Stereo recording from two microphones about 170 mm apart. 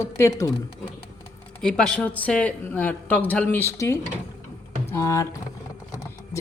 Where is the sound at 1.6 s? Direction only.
5° left (ahead or behind).